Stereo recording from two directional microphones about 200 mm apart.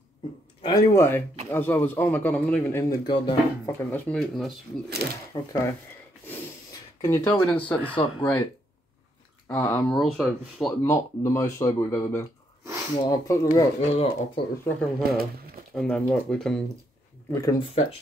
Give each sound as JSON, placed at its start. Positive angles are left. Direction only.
{"t": 0.6, "sound": "speech", "side_deg": 30}
{"t": 3.1, "sound": "speech", "side_deg": 20}
{"t": 3.9, "sound": "speech", "side_deg": 0}
{"t": 5.3, "sound": "speech", "side_deg": 15}
{"t": 7.0, "sound": "speech", "side_deg": 15}
{"t": 7.9, "sound": "speech", "side_deg": 25}
{"t": 9.5, "sound": "speech", "side_deg": 10}
{"t": 10.8, "sound": "speech", "side_deg": 15}
{"t": 13.7, "sound": "speech", "side_deg": 30}
{"t": 14.6, "sound": "speech", "side_deg": 5}
{"t": 17.3, "sound": "speech", "side_deg": 15}